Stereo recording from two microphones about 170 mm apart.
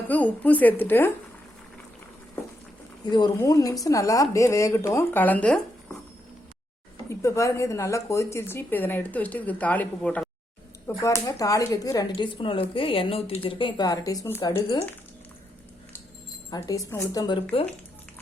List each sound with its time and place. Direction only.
0.1 s speech: 10° left (ahead or behind)
3.1 s speech: 25° left (ahead or behind); by 6.0 s 5° left (ahead or behind)
7.1 s speech: 15° left (ahead or behind)
16.5 s speech: 20° left (ahead or behind)